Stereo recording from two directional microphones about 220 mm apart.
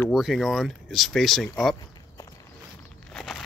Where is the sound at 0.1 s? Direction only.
Centre (ahead or behind).